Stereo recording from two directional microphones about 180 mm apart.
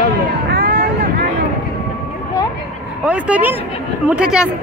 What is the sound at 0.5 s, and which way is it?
Vehicle, 65° right (ahead or behind).